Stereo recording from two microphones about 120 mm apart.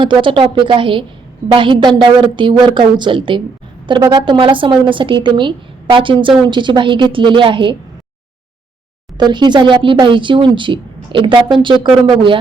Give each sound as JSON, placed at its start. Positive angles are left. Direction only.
{"t": 0.0, "sound": "a woman's voice", "side_deg": -45}
{"t": 9.1, "sound": "speech", "side_deg": -40}